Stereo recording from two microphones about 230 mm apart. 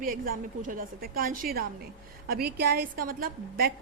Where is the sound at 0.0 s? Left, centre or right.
Right.